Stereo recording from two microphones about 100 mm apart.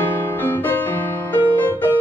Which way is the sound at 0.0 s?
20° left (ahead or behind).